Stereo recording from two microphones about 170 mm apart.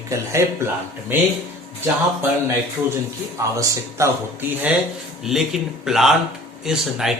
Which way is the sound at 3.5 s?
20° right (ahead or behind).